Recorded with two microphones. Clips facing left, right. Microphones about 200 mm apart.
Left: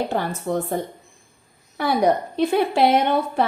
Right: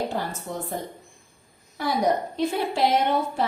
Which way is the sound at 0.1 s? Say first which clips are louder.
Left 7 dB; 65° left (ahead or behind).